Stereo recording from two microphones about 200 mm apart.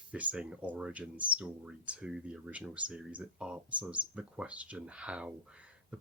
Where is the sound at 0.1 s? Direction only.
5° right (ahead or behind).